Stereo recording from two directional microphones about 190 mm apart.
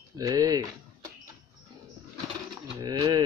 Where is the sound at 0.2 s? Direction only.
20° right (ahead or behind).